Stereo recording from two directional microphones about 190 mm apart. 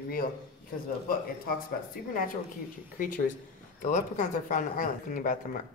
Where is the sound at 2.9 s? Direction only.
45° left (ahead or behind).